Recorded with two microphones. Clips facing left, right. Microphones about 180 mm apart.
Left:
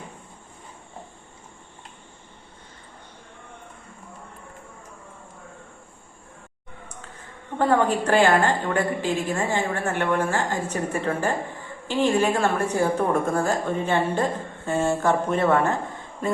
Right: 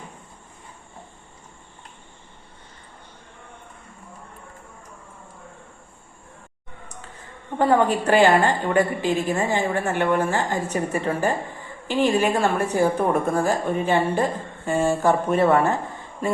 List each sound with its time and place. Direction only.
7.6 s a woman's voice: 10° right (ahead or behind)